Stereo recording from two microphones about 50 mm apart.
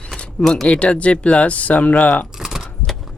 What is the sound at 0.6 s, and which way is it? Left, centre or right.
Speech, left.